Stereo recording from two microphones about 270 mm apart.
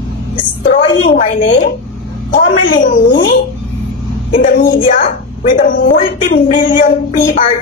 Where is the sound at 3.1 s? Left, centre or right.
Left.